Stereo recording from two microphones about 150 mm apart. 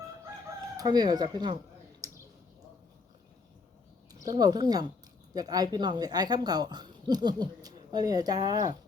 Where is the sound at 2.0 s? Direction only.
20° right (ahead or behind).